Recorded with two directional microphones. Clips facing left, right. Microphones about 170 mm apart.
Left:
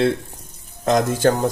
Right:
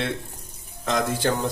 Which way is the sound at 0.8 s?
45° left (ahead or behind).